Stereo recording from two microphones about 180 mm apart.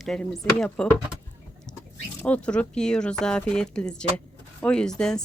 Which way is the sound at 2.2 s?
5° left (ahead or behind).